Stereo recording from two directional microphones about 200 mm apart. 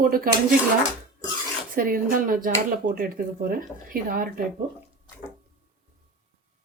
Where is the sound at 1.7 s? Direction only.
45° right (ahead or behind).